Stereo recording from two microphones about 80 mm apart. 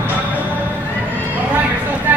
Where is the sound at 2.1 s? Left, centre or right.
Right.